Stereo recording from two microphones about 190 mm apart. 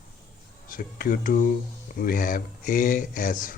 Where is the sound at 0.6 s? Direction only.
50° left (ahead or behind).